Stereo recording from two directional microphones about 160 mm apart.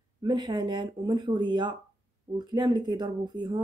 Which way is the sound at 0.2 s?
25° right (ahead or behind).